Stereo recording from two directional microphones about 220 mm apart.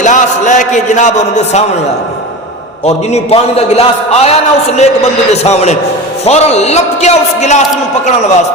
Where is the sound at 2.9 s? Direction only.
30° left (ahead or behind).